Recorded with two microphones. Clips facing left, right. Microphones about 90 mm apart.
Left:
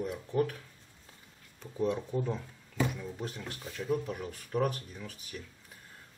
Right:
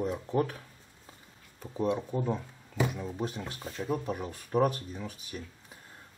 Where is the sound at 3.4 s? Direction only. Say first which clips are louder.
Right 3 dB; 30° right (ahead or behind).